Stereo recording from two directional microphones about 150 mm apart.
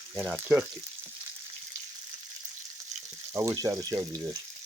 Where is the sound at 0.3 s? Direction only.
15° right (ahead or behind).